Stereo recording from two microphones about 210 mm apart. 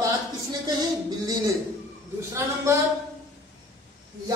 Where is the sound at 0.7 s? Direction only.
20° right (ahead or behind).